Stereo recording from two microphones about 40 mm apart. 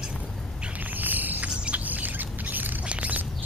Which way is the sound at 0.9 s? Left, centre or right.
Right.